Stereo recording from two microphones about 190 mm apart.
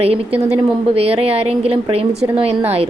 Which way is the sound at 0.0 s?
30° right (ahead or behind).